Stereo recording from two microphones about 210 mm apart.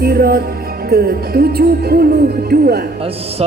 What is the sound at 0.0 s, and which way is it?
Music, 45° right (ahead or behind).